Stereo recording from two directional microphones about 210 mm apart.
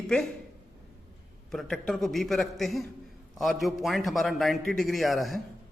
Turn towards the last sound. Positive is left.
turn(degrees=0)  # may be behind; listen again after turning